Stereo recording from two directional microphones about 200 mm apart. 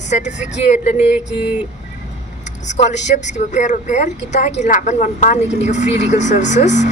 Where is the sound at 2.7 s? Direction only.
35° left (ahead or behind).